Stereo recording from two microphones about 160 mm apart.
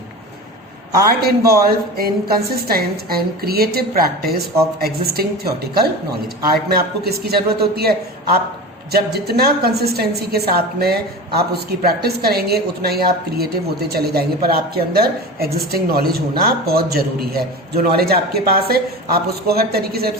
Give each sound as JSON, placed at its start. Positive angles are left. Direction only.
{"t": 1.6, "sound": "a woman's voice", "side_deg": -70}